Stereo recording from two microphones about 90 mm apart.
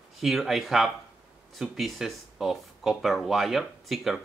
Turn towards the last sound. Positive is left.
turn(degrees=-5)  # may be behind; listen again after turning